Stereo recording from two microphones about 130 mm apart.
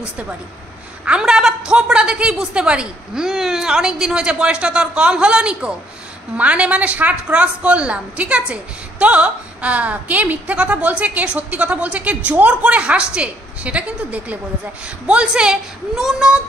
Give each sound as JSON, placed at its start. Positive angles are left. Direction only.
{"t": 1.0, "sound": "a woman's voice", "side_deg": -5}